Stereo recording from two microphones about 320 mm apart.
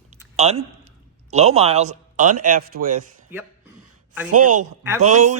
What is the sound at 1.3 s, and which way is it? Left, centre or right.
Speech, right.